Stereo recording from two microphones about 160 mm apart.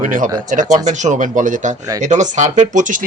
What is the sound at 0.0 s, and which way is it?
Speech, 55° right (ahead or behind).